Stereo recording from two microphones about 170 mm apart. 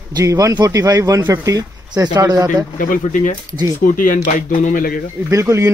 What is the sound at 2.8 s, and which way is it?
Speech, 50° left (ahead or behind).